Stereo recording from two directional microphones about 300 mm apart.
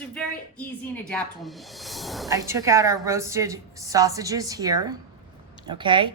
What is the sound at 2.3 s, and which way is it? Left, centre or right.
A woman's voice, centre.